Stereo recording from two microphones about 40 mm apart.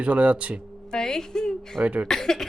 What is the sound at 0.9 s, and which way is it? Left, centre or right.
Speech, centre.